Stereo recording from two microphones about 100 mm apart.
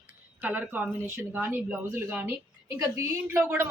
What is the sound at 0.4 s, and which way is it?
A woman's voice, 15° right (ahead or behind).